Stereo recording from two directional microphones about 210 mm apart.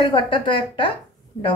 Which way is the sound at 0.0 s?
25° left (ahead or behind).